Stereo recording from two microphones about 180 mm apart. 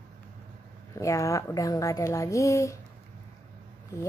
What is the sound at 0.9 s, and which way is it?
A woman's voice, 15° left (ahead or behind).